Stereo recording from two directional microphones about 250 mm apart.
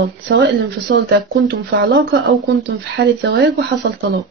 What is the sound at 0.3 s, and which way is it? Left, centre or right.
Speech, right.